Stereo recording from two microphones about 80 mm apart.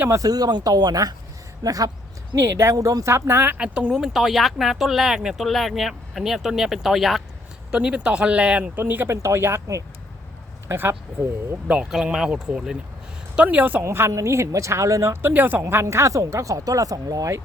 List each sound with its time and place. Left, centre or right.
0.1 s speech: right
2.4 s speech: right
3.6 s speech: centre
7.7 s speech: centre; by 9.6 s right
10.7 s speech: right
11.7 s speech: centre
13.8 s speech: right
15.3 s speech: right